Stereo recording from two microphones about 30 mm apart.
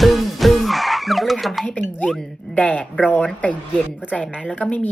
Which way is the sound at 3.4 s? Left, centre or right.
Left.